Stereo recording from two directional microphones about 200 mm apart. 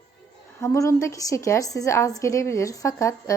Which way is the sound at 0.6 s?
15° left (ahead or behind).